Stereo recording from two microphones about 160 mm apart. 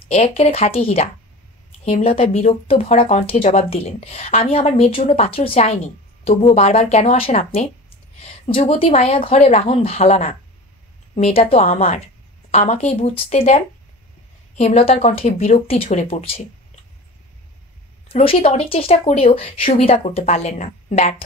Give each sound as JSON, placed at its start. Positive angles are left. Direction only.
{"t": 0.1, "sound": "speech", "side_deg": 40}
{"t": 14.6, "sound": "speech", "side_deg": 40}
{"t": 18.0, "sound": "speech", "side_deg": 35}